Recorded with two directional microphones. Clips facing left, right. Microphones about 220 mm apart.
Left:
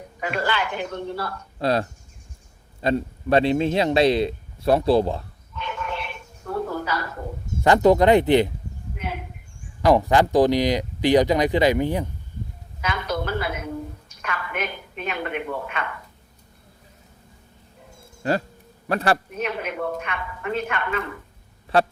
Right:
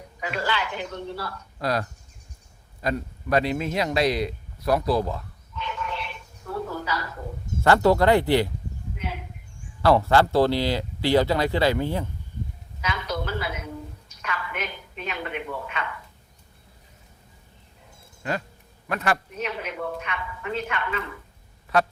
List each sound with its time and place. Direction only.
0.2 s a woman's voice: 55° left (ahead or behind)
1.5 s a man's voice: 25° left (ahead or behind)
5.5 s a sound: 55° left (ahead or behind)
7.6 s a man's voice: 15° left (ahead or behind)
9.0 s a sound: 55° left (ahead or behind)
9.8 s speech: 15° left (ahead or behind)
12.8 s a sound: 55° left (ahead or behind)
18.2 s a man's voice: 35° left (ahead or behind)
19.4 s speech: 55° left (ahead or behind)
21.7 s speech: 30° left (ahead or behind)